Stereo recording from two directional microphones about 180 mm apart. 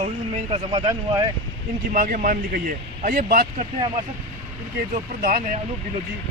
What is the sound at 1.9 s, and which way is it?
Speech, 45° right (ahead or behind).